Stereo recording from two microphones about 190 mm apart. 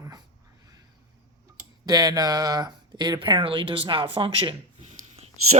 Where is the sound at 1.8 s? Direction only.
20° right (ahead or behind).